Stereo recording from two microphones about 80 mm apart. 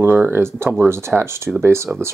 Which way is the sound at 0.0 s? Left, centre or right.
Right.